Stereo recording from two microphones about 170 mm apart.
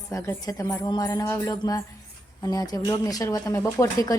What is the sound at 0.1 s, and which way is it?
Speech, 20° left (ahead or behind).